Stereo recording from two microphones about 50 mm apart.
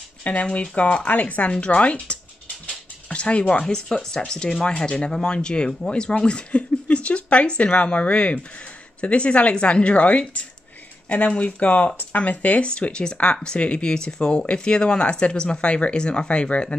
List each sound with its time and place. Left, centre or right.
0.2 s speech: left
5.7 s speech: centre
5.9 s speech: centre
12.6 s speech: left